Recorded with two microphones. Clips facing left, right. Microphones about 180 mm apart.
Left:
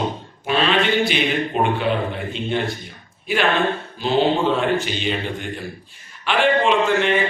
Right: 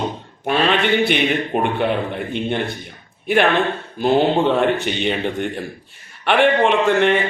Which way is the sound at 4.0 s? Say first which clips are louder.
Right 3 dB; 55° right (ahead or behind).